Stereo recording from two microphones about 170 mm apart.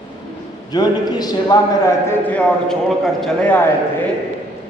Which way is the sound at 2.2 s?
10° left (ahead or behind).